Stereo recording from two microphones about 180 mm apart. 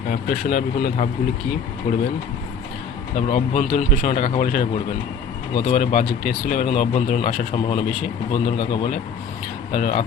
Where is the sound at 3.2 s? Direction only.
40° left (ahead or behind).